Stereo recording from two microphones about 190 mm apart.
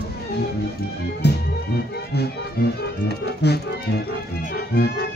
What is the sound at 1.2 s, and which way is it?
Music, 60° left (ahead or behind).